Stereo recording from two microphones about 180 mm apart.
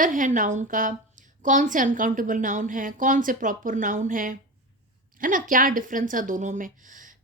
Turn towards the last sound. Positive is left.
turn(degrees=-45)  # may be behind; listen again after turning